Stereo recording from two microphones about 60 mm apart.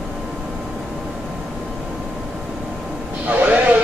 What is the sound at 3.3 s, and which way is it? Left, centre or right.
Vehicle, right.